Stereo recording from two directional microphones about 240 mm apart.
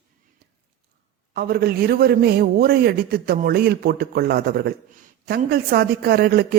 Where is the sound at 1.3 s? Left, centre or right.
Right.